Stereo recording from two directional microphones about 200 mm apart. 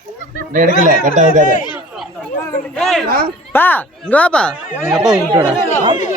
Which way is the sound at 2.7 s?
Centre (ahead or behind).